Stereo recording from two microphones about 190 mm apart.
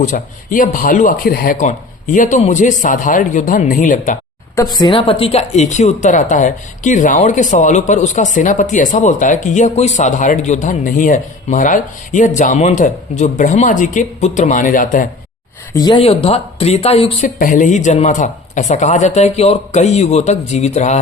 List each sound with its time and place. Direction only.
0.0 s speech: 45° left (ahead or behind)
4.5 s a woman's voice: 20° left (ahead or behind); by 15.0 s 45° left (ahead or behind)
15.7 s a woman's voice: 20° left (ahead or behind); by 21.0 s 35° left (ahead or behind)